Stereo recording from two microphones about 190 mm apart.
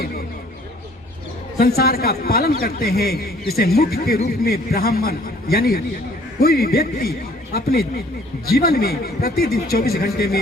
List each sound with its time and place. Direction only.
1.5 s a man's voice: 55° left (ahead or behind)